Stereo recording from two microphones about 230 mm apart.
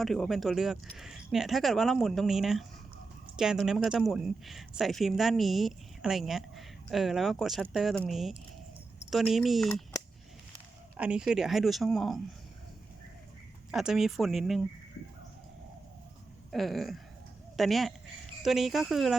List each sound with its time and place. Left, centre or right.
0.0 s speech: centre
10.9 s speech: centre
13.7 s speech: centre
16.5 s speech: centre